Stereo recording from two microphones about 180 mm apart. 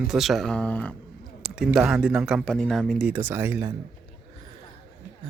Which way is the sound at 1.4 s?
5° right (ahead or behind).